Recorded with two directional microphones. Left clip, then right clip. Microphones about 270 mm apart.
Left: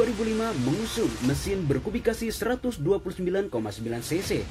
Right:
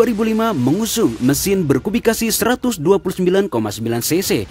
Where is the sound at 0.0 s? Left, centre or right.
Right.